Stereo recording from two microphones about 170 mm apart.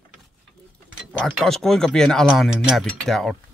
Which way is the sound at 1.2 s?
Centre (ahead or behind).